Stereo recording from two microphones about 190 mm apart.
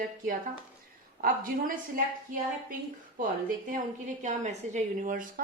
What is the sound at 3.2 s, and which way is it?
A woman's voice, 45° right (ahead or behind).